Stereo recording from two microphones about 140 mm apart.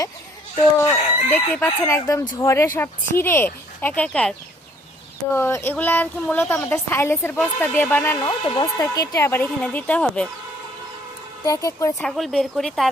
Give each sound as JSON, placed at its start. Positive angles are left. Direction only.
{"t": 0.8, "sound": "a woman's voice", "side_deg": 20}
{"t": 5.3, "sound": "a woman's voice", "side_deg": 20}
{"t": 8.2, "sound": "a woman's voice", "side_deg": 30}
{"t": 11.4, "sound": "speech", "side_deg": 25}
{"t": 11.9, "sound": "speech", "side_deg": 0}